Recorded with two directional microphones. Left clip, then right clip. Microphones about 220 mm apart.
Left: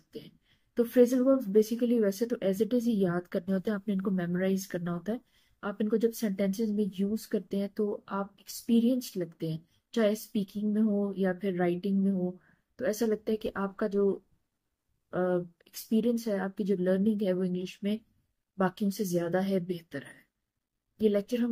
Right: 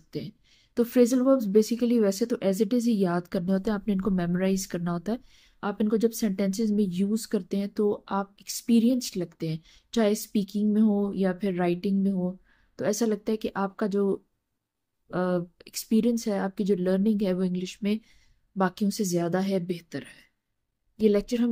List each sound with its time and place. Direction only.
0.7 s speech: 50° right (ahead or behind)
15.0 s speech: 50° right (ahead or behind)